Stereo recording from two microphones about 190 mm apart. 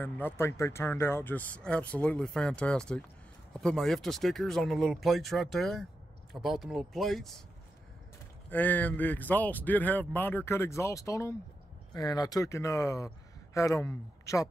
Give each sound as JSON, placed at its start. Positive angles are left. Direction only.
{"t": 0.0, "sound": "speech", "side_deg": 10}
{"t": 8.5, "sound": "a man's voice", "side_deg": 10}